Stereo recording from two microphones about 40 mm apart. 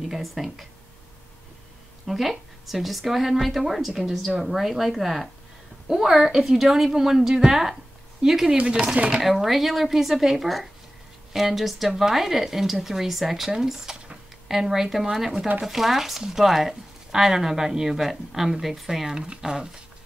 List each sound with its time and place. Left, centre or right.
0.1 s speech: centre
2.0 s speech: centre; by 8.9 s right
9.1 s speech: centre
19.1 s speech: right